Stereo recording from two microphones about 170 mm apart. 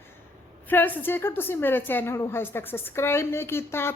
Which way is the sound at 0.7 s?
10° left (ahead or behind).